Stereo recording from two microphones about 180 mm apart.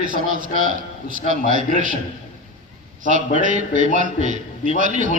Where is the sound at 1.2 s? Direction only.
45° left (ahead or behind).